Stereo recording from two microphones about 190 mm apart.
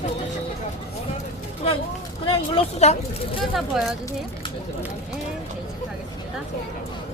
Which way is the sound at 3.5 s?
Centre (ahead or behind).